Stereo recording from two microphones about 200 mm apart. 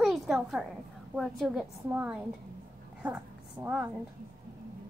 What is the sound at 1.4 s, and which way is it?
Speech, centre (ahead or behind).